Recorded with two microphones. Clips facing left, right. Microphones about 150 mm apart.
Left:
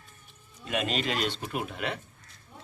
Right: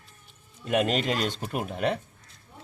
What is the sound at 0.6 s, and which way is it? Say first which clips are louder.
A man's voice: right 5 dB; 50° right (ahead or behind).